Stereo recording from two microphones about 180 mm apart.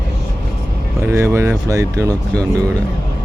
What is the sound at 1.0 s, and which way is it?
Speech, 15° right (ahead or behind).